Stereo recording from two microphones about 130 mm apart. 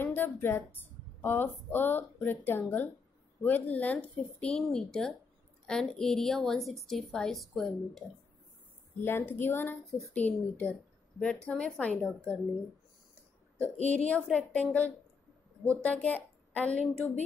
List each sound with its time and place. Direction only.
0.0 s a woman's voice: 15° left (ahead or behind)
9.0 s a woman's voice: 15° left (ahead or behind)
13.9 s speech: 10° left (ahead or behind)